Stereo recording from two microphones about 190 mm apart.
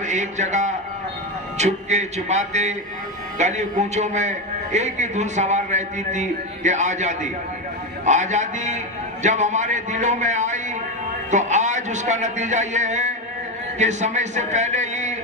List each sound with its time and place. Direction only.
0.0 s a man's voice: 40° right (ahead or behind)